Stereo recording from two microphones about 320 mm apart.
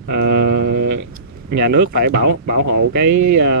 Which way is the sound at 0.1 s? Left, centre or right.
Right.